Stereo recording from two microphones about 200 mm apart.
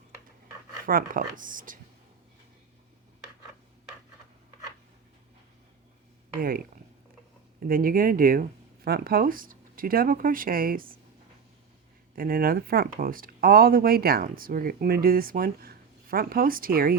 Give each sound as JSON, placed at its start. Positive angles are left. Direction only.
{"t": 0.9, "sound": "speech", "side_deg": -45}
{"t": 7.7, "sound": "speech", "side_deg": -45}
{"t": 12.1, "sound": "speech", "side_deg": -45}